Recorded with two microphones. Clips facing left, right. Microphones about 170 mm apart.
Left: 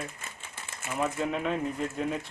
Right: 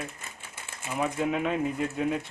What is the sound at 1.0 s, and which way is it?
A man's voice, 5° right (ahead or behind).